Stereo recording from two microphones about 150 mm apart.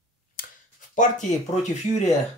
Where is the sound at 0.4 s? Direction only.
75° left (ahead or behind).